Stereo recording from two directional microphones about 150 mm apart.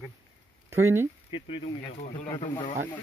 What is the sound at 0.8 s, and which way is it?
Speech, 15° right (ahead or behind).